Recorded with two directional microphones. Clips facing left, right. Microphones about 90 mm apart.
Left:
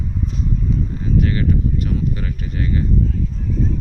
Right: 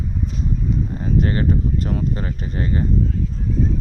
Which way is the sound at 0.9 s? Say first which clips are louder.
Even; 35° right (ahead or behind).